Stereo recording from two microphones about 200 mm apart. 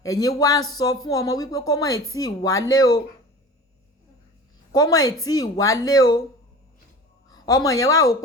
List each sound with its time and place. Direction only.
0.0 s a woman's voice: 15° left (ahead or behind)
4.7 s a woman's voice: 20° left (ahead or behind)
7.3 s a sound: 20° left (ahead or behind)
7.8 s a woman's voice: 15° left (ahead or behind)